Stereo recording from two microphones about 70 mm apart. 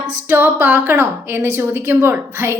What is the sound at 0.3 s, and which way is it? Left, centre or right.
A woman's voice, right.